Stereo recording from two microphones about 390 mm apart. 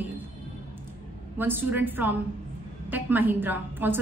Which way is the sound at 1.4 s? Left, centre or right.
Centre.